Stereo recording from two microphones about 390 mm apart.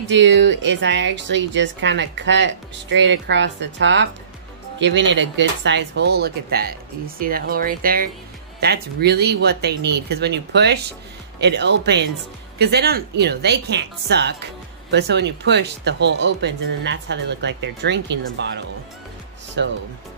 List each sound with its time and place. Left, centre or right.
0.0 s speech: right